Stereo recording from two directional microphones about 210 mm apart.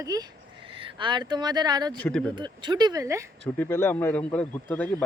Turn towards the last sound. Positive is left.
turn(degrees=5)  # may be behind; listen again after turning